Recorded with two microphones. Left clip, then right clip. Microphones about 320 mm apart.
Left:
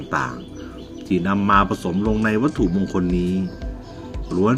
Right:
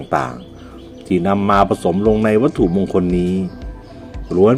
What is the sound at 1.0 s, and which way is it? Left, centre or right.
Speech, centre.